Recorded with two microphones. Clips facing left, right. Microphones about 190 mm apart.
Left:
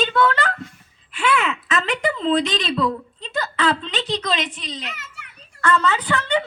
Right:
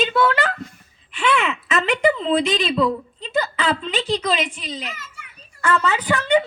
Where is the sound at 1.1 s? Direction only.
5° left (ahead or behind).